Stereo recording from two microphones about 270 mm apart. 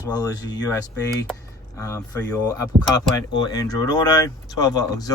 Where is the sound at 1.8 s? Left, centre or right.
Centre.